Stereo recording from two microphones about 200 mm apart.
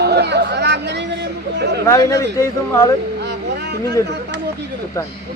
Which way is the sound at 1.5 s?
60° right (ahead or behind).